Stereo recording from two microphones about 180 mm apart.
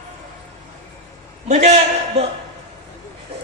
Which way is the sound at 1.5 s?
40° right (ahead or behind).